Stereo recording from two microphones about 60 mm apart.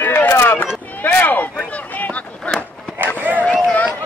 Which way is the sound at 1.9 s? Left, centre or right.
Left.